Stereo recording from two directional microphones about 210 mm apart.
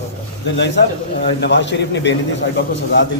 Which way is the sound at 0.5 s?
55° left (ahead or behind).